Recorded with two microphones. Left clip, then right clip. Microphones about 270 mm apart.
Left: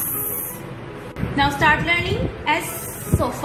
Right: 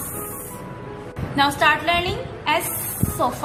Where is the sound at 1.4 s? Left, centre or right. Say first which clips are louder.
Even; centre.